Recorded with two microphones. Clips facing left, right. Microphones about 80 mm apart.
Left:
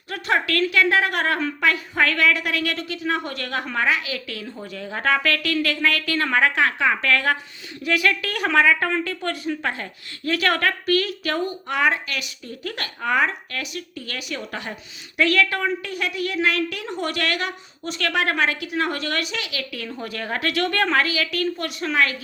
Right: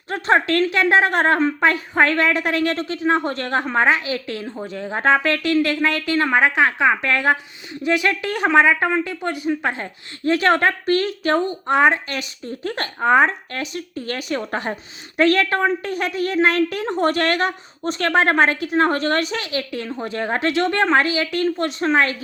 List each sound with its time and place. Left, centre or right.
0.1 s a woman's voice: right